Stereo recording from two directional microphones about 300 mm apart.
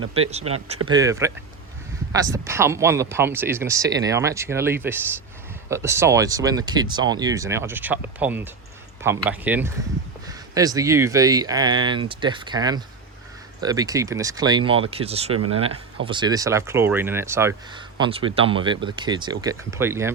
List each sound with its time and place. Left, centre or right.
0.0 s speech: right
0.9 s speech: centre